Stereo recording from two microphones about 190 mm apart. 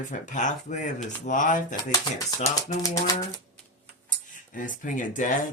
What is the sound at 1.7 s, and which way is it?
Speech, 20° left (ahead or behind).